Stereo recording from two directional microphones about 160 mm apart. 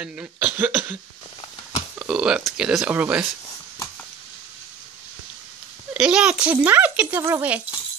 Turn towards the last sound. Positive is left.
turn(degrees=-10)  # may be behind; listen again after turning